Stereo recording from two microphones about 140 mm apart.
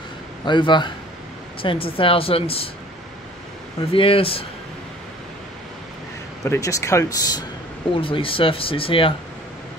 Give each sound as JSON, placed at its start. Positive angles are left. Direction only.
{"t": 0.5, "sound": "a woman's voice", "side_deg": 35}
{"t": 3.9, "sound": "a woman's voice", "side_deg": 40}
{"t": 6.4, "sound": "speech", "side_deg": 20}
{"t": 8.0, "sound": "a woman's voice", "side_deg": 40}